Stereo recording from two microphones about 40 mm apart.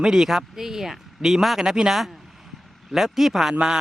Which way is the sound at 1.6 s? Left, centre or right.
Centre.